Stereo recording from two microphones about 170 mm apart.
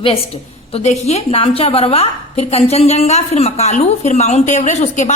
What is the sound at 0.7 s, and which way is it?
A woman's voice, 40° left (ahead or behind).